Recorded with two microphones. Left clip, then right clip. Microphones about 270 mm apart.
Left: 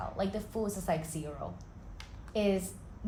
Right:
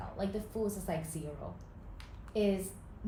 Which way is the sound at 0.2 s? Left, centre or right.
Centre.